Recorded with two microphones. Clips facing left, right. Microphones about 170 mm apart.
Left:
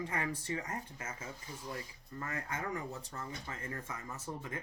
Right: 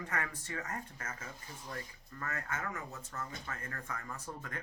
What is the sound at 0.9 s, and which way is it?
Speech, 10° left (ahead or behind).